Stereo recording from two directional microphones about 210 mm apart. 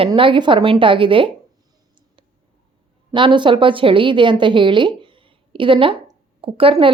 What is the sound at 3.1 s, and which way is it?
A woman's voice, 25° right (ahead or behind).